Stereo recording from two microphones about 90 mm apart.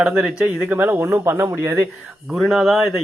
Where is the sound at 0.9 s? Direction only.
30° right (ahead or behind).